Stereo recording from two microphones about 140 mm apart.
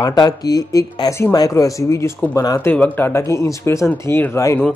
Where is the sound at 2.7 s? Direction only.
15° left (ahead or behind).